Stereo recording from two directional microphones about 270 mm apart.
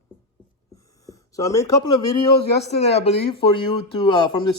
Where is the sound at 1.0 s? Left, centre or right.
Centre.